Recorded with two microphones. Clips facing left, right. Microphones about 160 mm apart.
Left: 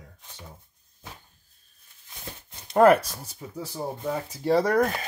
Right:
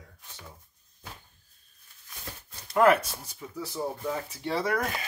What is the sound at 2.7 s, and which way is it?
Speech, 35° left (ahead or behind).